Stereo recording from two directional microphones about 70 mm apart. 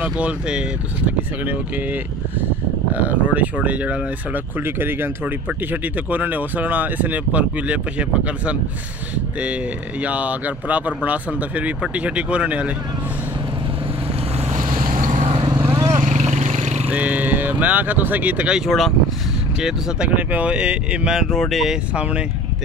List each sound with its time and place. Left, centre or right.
0.0 s speech: centre
10.0 s speech: right
15.6 s vehicle: right
16.9 s speech: right
18.7 s speech: centre
20.2 s speech: right
21.3 s speech: centre
21.9 s speech: centre